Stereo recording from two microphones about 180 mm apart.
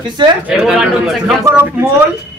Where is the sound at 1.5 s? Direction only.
15° right (ahead or behind).